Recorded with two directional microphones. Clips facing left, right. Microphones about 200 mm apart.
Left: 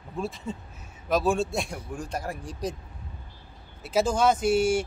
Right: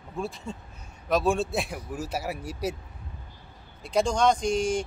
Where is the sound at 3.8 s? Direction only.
5° left (ahead or behind).